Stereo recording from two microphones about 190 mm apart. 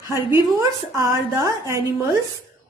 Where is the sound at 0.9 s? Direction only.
20° right (ahead or behind).